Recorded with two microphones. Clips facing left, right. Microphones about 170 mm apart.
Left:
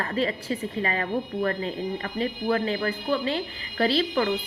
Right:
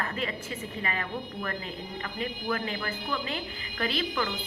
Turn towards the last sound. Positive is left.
turn(degrees=35)  # may be behind; listen again after turning